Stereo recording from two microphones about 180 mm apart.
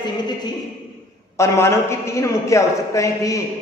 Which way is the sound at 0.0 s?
25° left (ahead or behind).